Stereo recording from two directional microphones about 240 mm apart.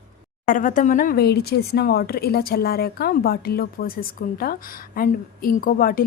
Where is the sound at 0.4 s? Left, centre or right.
Left.